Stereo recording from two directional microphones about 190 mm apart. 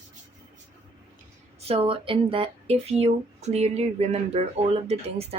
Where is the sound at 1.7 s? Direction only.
30° right (ahead or behind).